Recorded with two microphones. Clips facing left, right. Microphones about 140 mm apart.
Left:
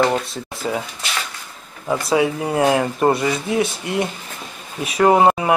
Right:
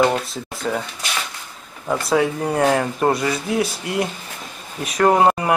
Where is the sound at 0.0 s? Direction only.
Centre (ahead or behind).